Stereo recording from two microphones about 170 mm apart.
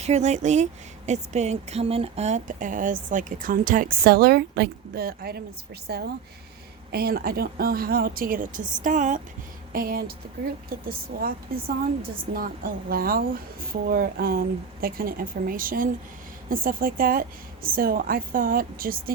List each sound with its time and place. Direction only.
0.0 s a woman's voice: 40° right (ahead or behind)
9.7 s a woman's voice: 60° right (ahead or behind)